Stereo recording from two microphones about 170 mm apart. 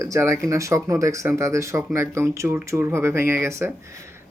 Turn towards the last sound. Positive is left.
turn(degrees=-15)  # may be behind; listen again after turning